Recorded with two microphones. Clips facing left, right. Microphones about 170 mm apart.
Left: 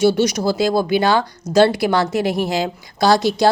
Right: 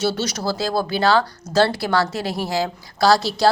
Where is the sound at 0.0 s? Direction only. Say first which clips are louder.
Left 7 dB; 15° left (ahead or behind).